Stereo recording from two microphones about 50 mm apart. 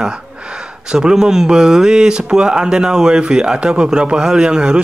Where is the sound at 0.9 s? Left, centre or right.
Centre.